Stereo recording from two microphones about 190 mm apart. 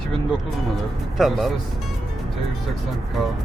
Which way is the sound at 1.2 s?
Centre (ahead or behind).